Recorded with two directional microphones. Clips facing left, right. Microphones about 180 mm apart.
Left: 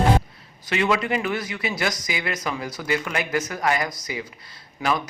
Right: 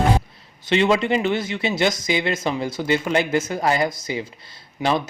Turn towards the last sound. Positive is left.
turn(degrees=-30)  # may be behind; listen again after turning